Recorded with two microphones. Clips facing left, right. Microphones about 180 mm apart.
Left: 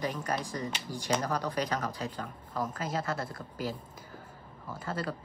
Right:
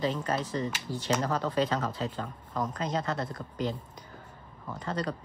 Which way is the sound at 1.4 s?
25° right (ahead or behind).